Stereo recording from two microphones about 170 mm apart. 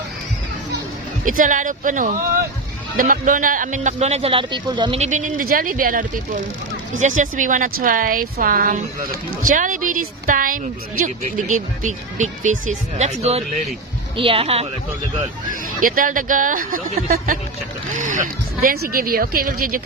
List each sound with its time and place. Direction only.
1.2 s speech: 50° right (ahead or behind); by 4.9 s 25° right (ahead or behind)
4.9 s speech: 45° right (ahead or behind)
15.8 s speech: 55° right (ahead or behind)